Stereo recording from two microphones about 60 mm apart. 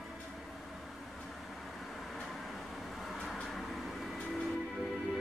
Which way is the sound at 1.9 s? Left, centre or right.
Centre.